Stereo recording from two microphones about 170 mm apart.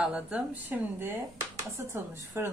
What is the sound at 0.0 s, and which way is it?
A woman's voice, 5° right (ahead or behind).